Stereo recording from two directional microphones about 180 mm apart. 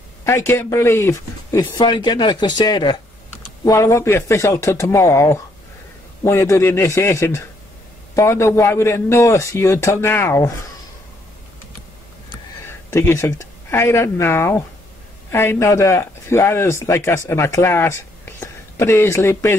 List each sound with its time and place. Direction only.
0.2 s speech: 15° left (ahead or behind)
12.9 s speech: 15° left (ahead or behind)